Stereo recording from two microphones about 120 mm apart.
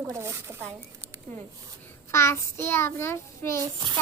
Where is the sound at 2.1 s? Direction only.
20° left (ahead or behind).